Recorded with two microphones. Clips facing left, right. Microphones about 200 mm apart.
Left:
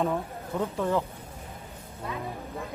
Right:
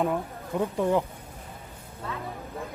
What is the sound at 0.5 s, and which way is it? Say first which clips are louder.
Speech: right 3 dB; 15° right (ahead or behind).